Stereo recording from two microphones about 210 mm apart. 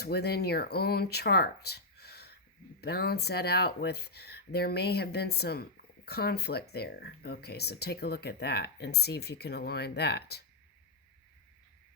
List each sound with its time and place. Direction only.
0.0 s speech: 50° left (ahead or behind)